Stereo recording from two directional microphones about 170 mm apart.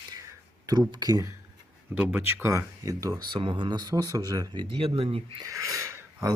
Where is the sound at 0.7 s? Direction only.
25° right (ahead or behind).